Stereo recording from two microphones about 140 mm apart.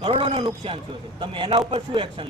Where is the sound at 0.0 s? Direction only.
40° right (ahead or behind).